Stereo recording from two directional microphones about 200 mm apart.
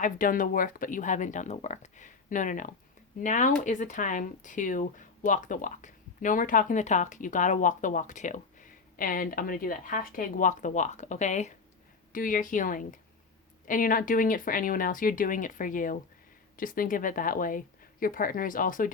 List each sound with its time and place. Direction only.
0.0 s speech: 40° left (ahead or behind)